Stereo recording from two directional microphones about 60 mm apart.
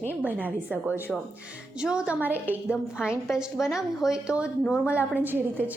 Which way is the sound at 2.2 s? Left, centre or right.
Right.